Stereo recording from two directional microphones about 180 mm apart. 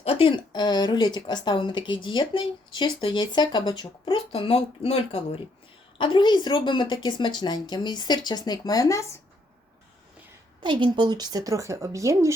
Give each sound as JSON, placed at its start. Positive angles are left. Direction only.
{"t": 0.0, "sound": "speech", "side_deg": 30}
{"t": 10.6, "sound": "speech", "side_deg": -25}